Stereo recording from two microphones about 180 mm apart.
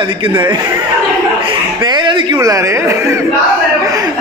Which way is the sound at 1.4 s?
25° right (ahead or behind).